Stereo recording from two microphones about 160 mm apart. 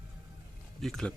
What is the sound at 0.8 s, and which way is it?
Speech, centre (ahead or behind).